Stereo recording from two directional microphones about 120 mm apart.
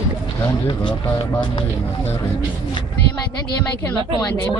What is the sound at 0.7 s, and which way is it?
Speech, 45° left (ahead or behind).